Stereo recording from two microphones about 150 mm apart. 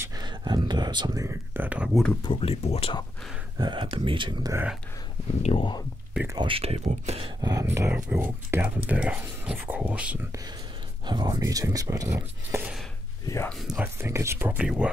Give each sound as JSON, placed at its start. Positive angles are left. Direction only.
{"t": 0.0, "sound": "speech", "side_deg": -30}
{"t": 2.2, "sound": "speech", "side_deg": 40}
{"t": 3.5, "sound": "speech", "side_deg": -30}
{"t": 5.4, "sound": "speech", "side_deg": 40}
{"t": 6.4, "sound": "speech", "side_deg": -40}
{"t": 7.4, "sound": "speech", "side_deg": -20}
{"t": 11.1, "sound": "speech", "side_deg": -25}
{"t": 13.5, "sound": "speech", "side_deg": 0}
{"t": 14.0, "sound": "speech", "side_deg": -15}